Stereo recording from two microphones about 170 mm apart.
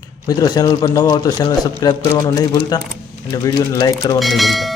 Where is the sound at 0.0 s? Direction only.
20° left (ahead or behind).